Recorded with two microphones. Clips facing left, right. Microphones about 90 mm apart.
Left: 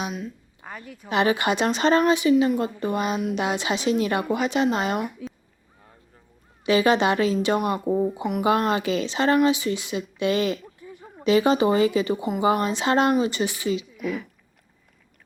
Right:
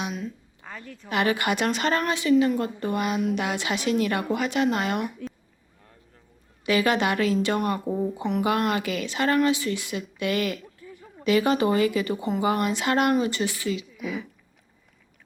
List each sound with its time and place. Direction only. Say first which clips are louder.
0.6 s speech: left 2 dB; 15° left (ahead or behind)
4.9 s a woman's voice: left 1 dB; centre (ahead or behind)
6.7 s speech: left 3 dB; 25° left (ahead or behind)
8.2 s speech: even; 10° left (ahead or behind)
8.4 s speech: left 5 dB; 25° left (ahead or behind)
10.8 s a sound: left 2 dB; 20° left (ahead or behind)
11.2 s speech: left 3 dB; 25° left (ahead or behind)
14.0 s a woman's voice: left 3 dB; 5° right (ahead or behind)